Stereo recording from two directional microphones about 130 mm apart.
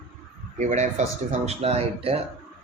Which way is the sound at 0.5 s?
65° right (ahead or behind).